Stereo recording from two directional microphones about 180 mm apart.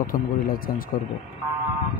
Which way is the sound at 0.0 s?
50° left (ahead or behind).